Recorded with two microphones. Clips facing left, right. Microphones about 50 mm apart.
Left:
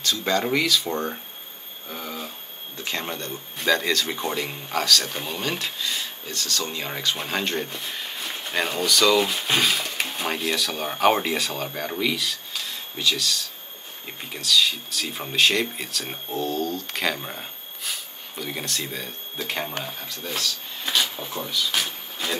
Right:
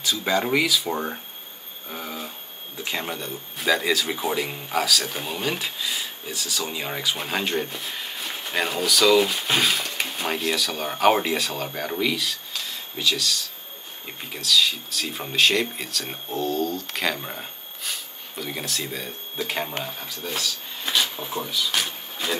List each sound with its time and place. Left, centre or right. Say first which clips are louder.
0.0 s speech: even; centre